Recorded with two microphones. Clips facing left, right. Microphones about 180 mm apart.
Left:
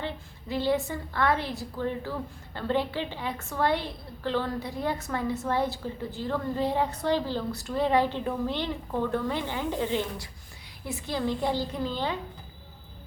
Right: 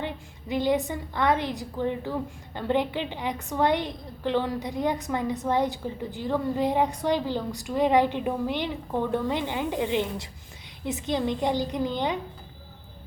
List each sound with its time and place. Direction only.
0.0 s a woman's voice: 15° right (ahead or behind)